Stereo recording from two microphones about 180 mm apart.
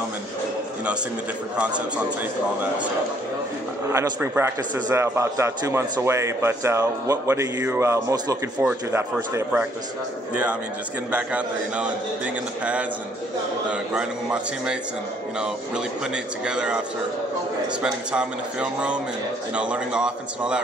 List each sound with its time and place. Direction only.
3.9 s speech: 15° right (ahead or behind)
11.1 s speech: 5° right (ahead or behind)
13.7 s a man's voice: 5° right (ahead or behind)
16.4 s a man's voice: 5° right (ahead or behind)
17.8 s a man's voice: 5° right (ahead or behind)